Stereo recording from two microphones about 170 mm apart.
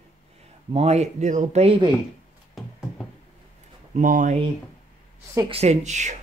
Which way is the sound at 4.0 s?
50° right (ahead or behind).